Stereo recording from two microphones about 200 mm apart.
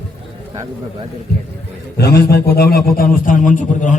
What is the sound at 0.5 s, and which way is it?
Speech, 20° right (ahead or behind).